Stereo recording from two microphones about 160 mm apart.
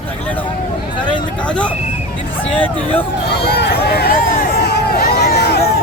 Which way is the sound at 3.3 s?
85° left.